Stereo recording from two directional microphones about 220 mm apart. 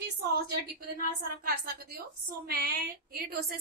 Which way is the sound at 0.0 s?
45° right (ahead or behind).